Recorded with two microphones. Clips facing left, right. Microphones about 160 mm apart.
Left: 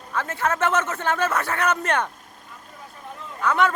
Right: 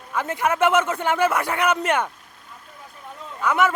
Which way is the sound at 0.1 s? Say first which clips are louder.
Right 2 dB; 15° right (ahead or behind).